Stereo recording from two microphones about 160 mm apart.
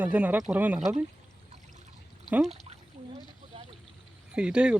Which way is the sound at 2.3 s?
5° right (ahead or behind).